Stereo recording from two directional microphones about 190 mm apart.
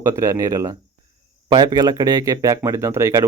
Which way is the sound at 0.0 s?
15° right (ahead or behind).